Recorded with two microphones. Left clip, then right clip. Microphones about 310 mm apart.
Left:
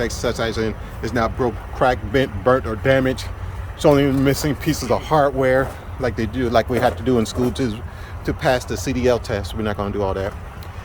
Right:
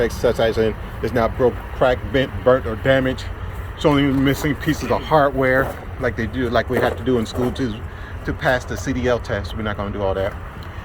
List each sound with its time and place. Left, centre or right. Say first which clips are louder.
0.0 s speech: right 4 dB; centre